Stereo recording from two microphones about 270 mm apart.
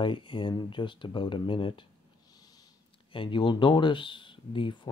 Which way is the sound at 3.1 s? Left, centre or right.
Centre.